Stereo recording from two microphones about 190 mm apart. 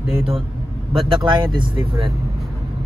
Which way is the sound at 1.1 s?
25° right (ahead or behind).